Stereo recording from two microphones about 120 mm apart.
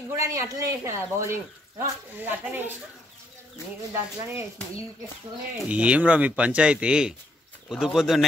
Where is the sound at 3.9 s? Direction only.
25° right (ahead or behind).